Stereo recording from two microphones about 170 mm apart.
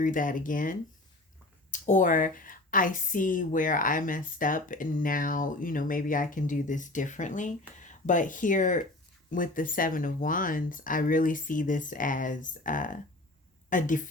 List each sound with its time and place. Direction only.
0.0 s a woman's voice: 50° left (ahead or behind)